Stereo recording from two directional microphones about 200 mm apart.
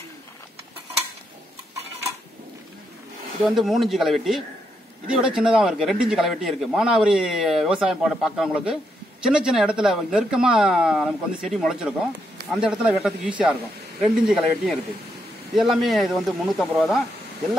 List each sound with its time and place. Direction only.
3.4 s a man's voice: centre (ahead or behind)